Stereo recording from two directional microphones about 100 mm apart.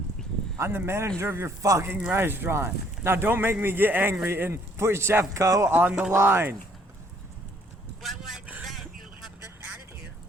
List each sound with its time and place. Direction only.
0.6 s speech: 25° right (ahead or behind)
5.6 s speech: 20° right (ahead or behind)
8.0 s a sound: centre (ahead or behind)
8.6 s vehicle: 5° right (ahead or behind)